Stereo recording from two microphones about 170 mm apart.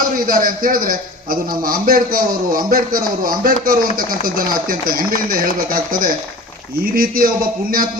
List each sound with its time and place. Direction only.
0.2 s a man's voice: 55° right (ahead or behind)